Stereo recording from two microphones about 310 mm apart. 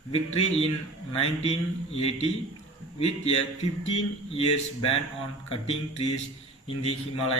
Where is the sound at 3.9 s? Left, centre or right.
Centre.